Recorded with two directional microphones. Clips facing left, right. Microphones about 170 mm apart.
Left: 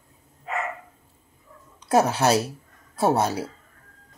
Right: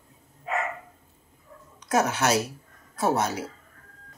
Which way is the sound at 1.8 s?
30° left (ahead or behind).